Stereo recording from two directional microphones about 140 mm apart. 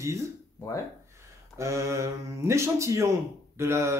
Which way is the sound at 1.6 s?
20° right (ahead or behind).